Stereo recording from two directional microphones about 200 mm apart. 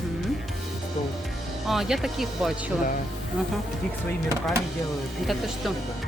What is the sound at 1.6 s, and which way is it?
Speech, centre (ahead or behind).